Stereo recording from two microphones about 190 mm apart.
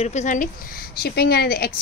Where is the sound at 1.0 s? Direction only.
55° left (ahead or behind).